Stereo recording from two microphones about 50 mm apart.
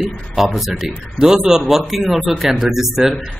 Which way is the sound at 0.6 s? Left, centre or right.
Centre.